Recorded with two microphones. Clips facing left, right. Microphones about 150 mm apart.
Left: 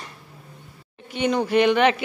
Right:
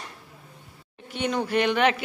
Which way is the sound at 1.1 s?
Centre (ahead or behind).